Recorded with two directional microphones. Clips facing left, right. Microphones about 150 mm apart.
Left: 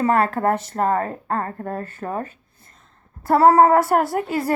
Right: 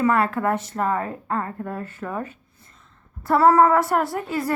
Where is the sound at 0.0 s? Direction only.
35° left (ahead or behind).